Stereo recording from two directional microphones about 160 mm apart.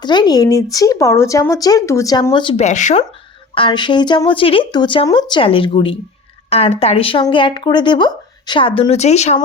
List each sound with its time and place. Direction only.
0.0 s speech: 25° left (ahead or behind)
2.6 s speech: 45° left (ahead or behind)
3.5 s speech: 30° left (ahead or behind)